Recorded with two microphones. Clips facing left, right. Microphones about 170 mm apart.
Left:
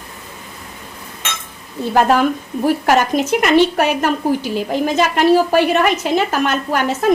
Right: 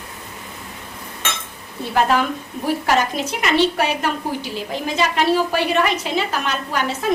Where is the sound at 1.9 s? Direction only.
45° left (ahead or behind).